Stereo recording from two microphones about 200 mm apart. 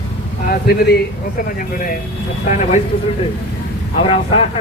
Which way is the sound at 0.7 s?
50° left (ahead or behind).